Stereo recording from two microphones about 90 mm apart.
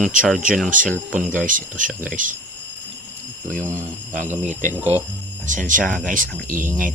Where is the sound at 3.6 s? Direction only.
30° right (ahead or behind).